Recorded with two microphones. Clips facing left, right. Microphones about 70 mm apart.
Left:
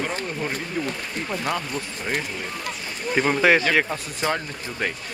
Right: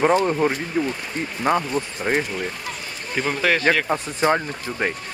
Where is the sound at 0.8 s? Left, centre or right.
Right.